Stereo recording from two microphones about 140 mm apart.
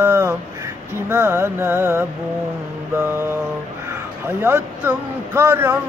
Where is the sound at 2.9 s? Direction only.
15° right (ahead or behind).